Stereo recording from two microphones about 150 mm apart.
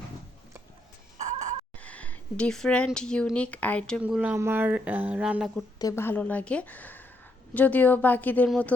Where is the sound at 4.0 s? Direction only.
10° right (ahead or behind).